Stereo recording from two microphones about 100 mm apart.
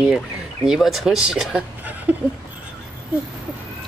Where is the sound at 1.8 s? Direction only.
15° right (ahead or behind).